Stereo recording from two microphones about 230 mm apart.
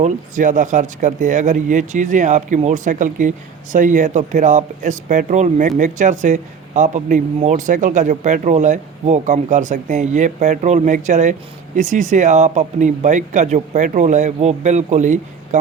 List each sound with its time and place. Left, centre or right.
0.0 s speech: right